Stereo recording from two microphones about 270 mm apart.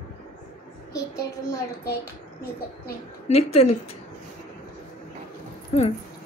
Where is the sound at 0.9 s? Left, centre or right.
Centre.